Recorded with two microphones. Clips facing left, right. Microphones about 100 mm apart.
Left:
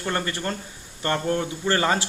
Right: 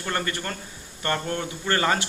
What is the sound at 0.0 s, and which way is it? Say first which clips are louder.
Speech: left 2 dB; 30° left (ahead or behind).